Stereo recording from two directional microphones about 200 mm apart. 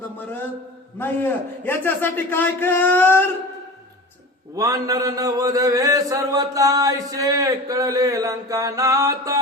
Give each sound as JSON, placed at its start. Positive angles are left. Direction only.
{"t": 0.9, "sound": "a man's voice", "side_deg": 10}
{"t": 4.5, "sound": "mantra", "side_deg": -15}